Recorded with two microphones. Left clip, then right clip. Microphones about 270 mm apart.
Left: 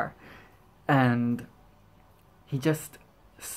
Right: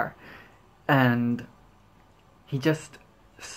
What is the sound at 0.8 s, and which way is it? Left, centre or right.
Speech, centre.